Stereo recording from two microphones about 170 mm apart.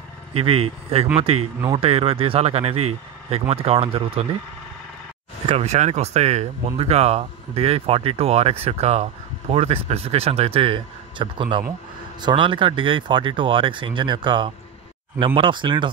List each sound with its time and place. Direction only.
0.4 s speech: 35° right (ahead or behind)
5.5 s speech: 40° right (ahead or behind)